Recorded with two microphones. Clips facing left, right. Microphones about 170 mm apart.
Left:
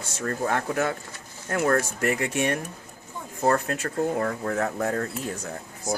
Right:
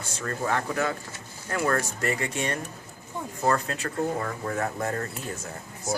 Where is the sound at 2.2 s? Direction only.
60° left (ahead or behind).